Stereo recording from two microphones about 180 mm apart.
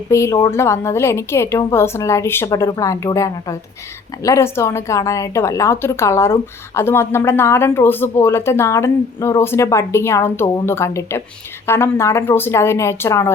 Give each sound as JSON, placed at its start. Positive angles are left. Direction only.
{"t": 0.1, "sound": "a woman's voice", "side_deg": 15}